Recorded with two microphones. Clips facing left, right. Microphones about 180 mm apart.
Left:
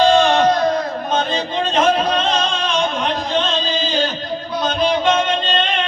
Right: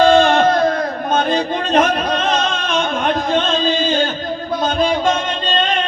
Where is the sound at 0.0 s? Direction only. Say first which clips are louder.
Right 2 dB; 55° right (ahead or behind).